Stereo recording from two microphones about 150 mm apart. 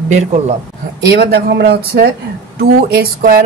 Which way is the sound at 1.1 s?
90° right.